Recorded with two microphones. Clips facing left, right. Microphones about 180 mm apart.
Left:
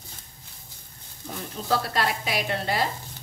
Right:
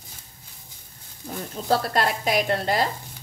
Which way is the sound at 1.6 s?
45° right (ahead or behind).